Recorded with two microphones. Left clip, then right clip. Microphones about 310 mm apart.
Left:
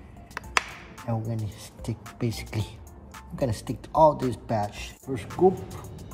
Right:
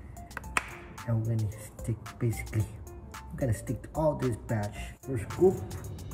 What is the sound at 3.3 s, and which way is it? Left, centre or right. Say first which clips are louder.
Speech: left 5 dB; centre.